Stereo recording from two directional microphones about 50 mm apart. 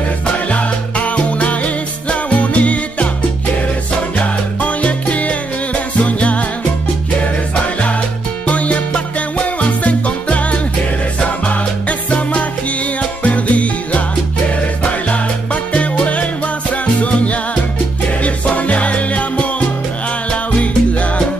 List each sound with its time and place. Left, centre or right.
0.5 s music: left
4.2 s music: left
8.5 s music: left
12.1 s music: left